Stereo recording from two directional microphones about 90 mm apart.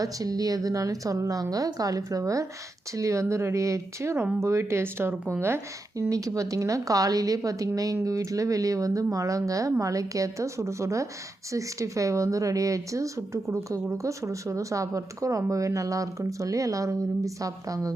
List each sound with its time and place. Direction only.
0.0 s speech: 40° right (ahead or behind); by 5.5 s 25° right (ahead or behind)
6.0 s speech: 40° right (ahead or behind)